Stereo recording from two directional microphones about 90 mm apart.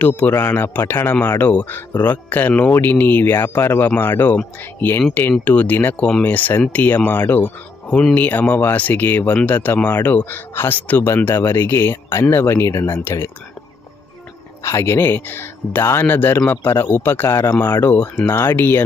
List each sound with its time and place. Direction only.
0.0 s speech: 20° left (ahead or behind)
14.6 s speech: 30° left (ahead or behind)